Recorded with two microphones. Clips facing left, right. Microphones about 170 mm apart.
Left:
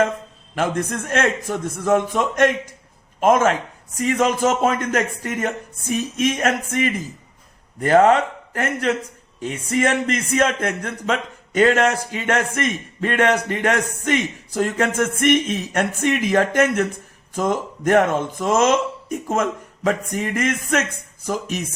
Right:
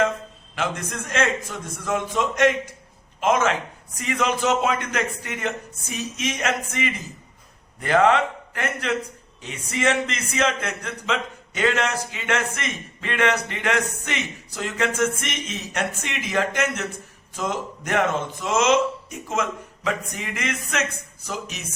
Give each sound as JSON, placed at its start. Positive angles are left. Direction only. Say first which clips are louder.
{"t": 0.5, "sound": "a man's voice", "louder": "left 6 dB", "side_deg": 50}